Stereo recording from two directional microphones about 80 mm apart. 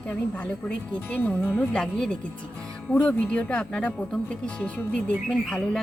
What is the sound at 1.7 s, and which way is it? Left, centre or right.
Speech, centre.